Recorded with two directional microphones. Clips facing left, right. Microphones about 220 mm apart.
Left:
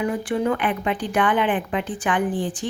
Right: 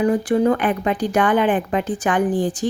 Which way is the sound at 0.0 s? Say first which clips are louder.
Right 6 dB; 40° right (ahead or behind).